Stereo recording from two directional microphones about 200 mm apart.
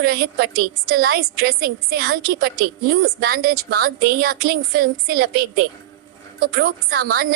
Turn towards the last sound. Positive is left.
turn(degrees=-50)  # may be behind; listen again after turning